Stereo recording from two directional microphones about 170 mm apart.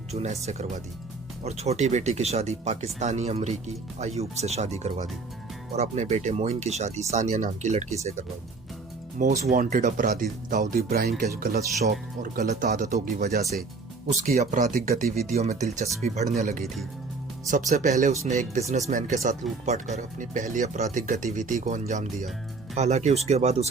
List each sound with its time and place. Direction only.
0.1 s speech: 40° right (ahead or behind)
9.1 s speech: 40° right (ahead or behind); by 12.3 s 65° right (ahead or behind)
12.4 s speech: 45° right (ahead or behind)
14.3 s speech: 45° right (ahead or behind)
15.3 s speech: 40° right (ahead or behind)